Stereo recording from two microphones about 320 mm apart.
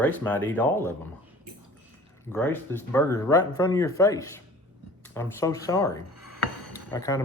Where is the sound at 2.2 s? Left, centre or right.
Centre.